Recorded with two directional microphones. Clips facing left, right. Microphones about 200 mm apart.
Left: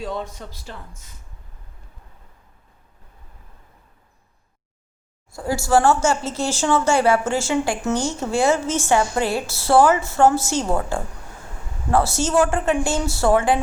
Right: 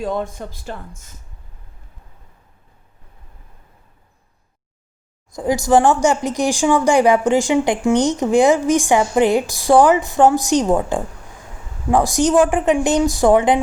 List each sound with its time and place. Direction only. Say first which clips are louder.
0.0 s speech: right 6 dB; 50° right (ahead or behind)
5.3 s speech: right 4 dB; 20° right (ahead or behind)